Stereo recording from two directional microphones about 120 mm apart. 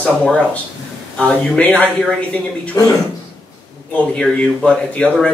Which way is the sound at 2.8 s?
30° left (ahead or behind).